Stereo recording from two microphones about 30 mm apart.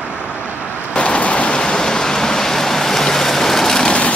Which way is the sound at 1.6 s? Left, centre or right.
Left.